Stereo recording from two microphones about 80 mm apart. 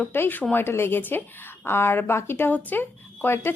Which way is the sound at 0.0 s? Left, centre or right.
Left.